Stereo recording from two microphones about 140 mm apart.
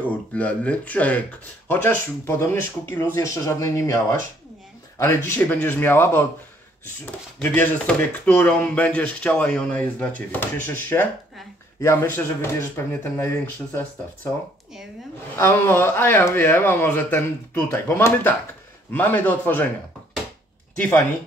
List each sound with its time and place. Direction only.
0.3 s speech: 10° left (ahead or behind)
7.3 s speech: 10° left (ahead or behind)
15.3 s speech: 20° left (ahead or behind)
20.7 s speech: 10° left (ahead or behind)